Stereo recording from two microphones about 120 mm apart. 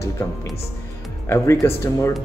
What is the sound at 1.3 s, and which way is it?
Speech, 20° left (ahead or behind).